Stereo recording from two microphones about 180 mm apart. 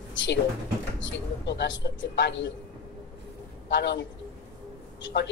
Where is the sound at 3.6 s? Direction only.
75° left (ahead or behind).